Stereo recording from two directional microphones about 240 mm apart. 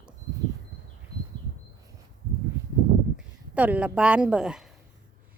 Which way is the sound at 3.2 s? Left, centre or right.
Centre.